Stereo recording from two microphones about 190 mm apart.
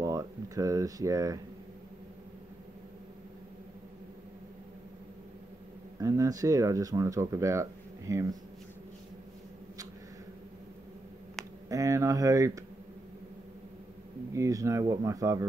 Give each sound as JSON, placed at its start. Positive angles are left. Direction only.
{"t": 0.0, "sound": "a sound", "side_deg": -15}
{"t": 5.9, "sound": "speech", "side_deg": -15}
{"t": 11.7, "sound": "speech", "side_deg": -15}
{"t": 14.3, "sound": "speech", "side_deg": -15}